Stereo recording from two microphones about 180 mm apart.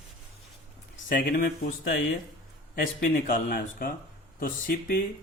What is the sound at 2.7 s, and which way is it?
Speech, 55° left (ahead or behind).